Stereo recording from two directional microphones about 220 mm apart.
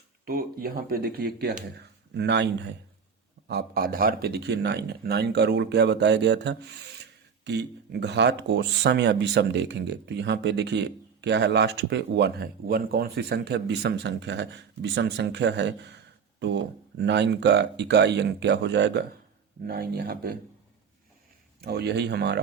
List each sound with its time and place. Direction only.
0.3 s speech: 45° right (ahead or behind)
17.0 s speech: 50° right (ahead or behind)
21.6 s speech: 50° right (ahead or behind)